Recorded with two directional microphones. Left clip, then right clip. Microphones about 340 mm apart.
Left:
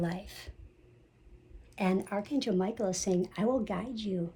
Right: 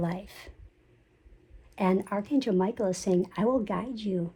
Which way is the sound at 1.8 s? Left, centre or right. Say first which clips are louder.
Right 4 dB; right.